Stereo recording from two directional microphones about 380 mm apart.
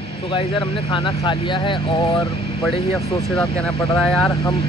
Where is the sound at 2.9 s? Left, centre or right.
Centre.